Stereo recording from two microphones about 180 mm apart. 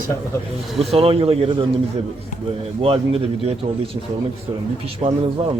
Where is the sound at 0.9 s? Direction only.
35° right (ahead or behind).